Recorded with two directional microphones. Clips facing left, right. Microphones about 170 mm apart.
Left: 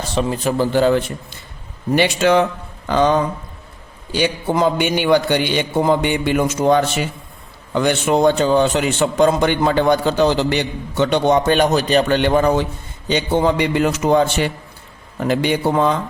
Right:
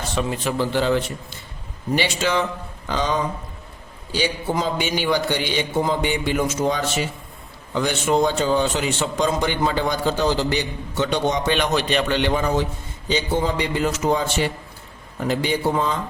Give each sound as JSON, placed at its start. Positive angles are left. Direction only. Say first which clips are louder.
{"t": 0.2, "sound": "a man's voice", "louder": "left 5 dB", "side_deg": 40}
{"t": 2.0, "sound": "speech", "louder": "left 8 dB", "side_deg": 55}